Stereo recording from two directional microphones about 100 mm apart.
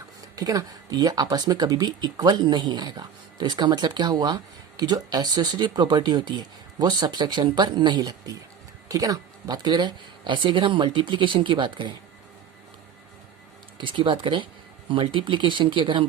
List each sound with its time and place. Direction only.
0.3 s speech: 40° right (ahead or behind); by 11.9 s 55° right (ahead or behind)
13.7 s speech: 55° right (ahead or behind)